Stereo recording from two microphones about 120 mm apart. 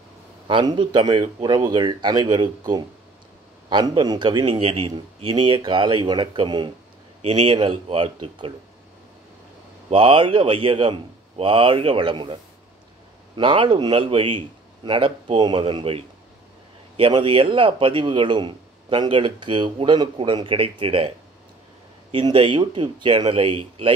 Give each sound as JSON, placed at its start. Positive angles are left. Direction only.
{"t": 0.5, "sound": "speech", "side_deg": -40}
{"t": 4.6, "sound": "speech", "side_deg": -55}
{"t": 7.2, "sound": "speech", "side_deg": -55}
{"t": 9.8, "sound": "speech", "side_deg": -45}
{"t": 13.4, "sound": "speech", "side_deg": -45}
{"t": 22.1, "sound": "speech", "side_deg": -50}